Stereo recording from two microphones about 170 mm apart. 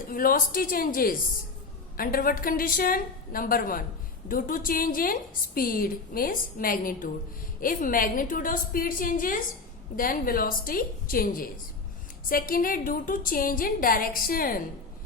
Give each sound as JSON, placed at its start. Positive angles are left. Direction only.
{"t": 0.1, "sound": "a woman's voice", "side_deg": 55}